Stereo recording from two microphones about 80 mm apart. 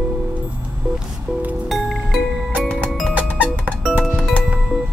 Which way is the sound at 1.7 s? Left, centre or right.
Centre.